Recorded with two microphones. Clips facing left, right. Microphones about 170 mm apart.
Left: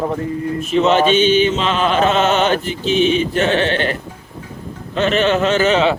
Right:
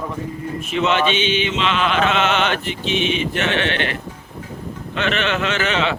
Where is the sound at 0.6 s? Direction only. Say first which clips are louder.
Left 5 dB; 40° left (ahead or behind).